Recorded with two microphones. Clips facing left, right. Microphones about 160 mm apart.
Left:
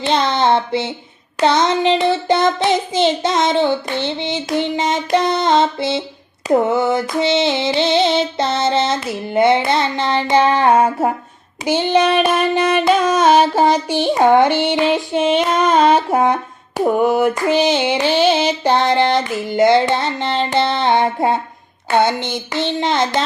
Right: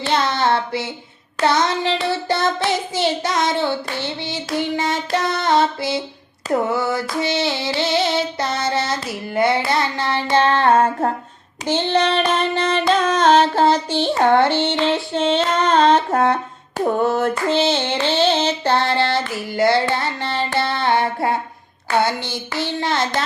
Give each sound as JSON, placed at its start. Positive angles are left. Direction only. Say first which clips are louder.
{"t": 0.0, "sound": "female singing", "louder": "left 3 dB", "side_deg": 20}
{"t": 11.6, "sound": "music", "louder": "left 3 dB", "side_deg": 10}
{"t": 21.8, "sound": "female singing", "louder": "left 4 dB", "side_deg": 20}